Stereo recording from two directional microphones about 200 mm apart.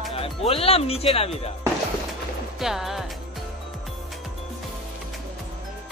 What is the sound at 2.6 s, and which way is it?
Music, centre (ahead or behind).